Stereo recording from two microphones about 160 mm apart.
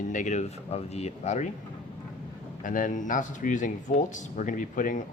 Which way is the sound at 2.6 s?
55° left (ahead or behind).